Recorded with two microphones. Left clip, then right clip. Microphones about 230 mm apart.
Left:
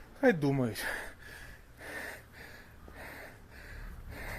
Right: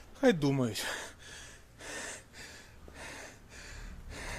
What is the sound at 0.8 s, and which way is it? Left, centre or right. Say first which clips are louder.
Gasp: left 1 dB; centre.